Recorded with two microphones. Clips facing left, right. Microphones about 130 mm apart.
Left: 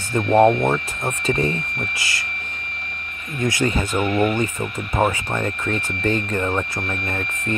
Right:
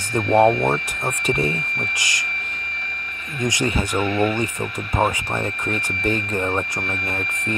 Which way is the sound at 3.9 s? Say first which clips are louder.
Left 1 dB; 15° left (ahead or behind).